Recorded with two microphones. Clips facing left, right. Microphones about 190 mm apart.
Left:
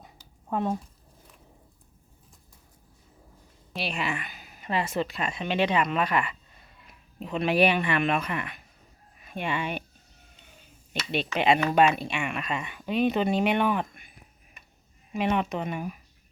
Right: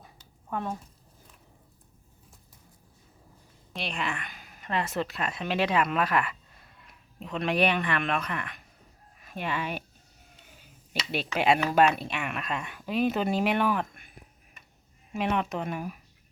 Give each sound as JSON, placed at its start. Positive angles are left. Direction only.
{"t": 0.5, "sound": "speech", "side_deg": 20}
{"t": 3.7, "sound": "speech", "side_deg": 5}
{"t": 10.9, "sound": "a sound", "side_deg": -5}
{"t": 11.3, "sound": "speech", "side_deg": -5}
{"t": 15.1, "sound": "speech", "side_deg": 0}